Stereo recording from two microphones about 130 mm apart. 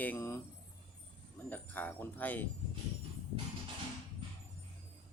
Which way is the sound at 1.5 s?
15° left (ahead or behind).